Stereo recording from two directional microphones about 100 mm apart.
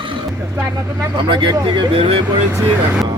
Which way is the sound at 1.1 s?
50° right (ahead or behind).